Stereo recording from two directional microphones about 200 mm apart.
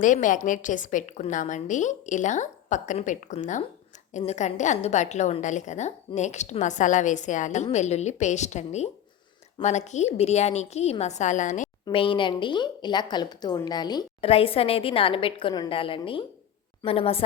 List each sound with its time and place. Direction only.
0.0 s a woman's voice: 40° left (ahead or behind)
11.9 s a woman's voice: 25° left (ahead or behind)